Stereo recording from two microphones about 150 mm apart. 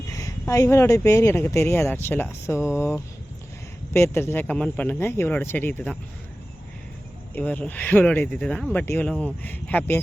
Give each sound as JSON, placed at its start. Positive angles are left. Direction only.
{"t": 0.1, "sound": "speech", "side_deg": 20}
{"t": 7.3, "sound": "speech", "side_deg": 10}